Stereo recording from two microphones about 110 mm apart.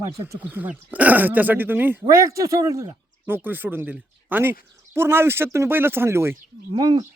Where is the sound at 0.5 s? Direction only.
15° right (ahead or behind).